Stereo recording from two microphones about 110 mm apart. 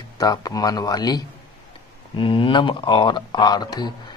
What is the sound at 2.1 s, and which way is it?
Speech, 50° left (ahead or behind).